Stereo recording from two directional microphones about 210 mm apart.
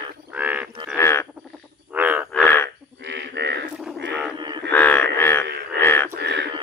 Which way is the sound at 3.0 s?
55° right (ahead or behind).